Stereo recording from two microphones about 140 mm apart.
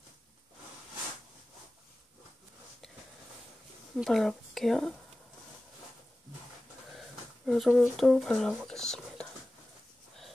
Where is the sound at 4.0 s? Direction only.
Centre (ahead or behind).